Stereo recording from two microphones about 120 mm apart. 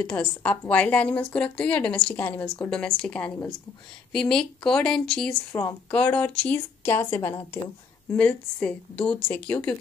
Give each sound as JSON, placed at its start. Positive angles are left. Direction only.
{"t": 0.0, "sound": "a woman's voice", "side_deg": 10}
{"t": 5.5, "sound": "speech", "side_deg": 25}
{"t": 5.9, "sound": "a woman's voice", "side_deg": 10}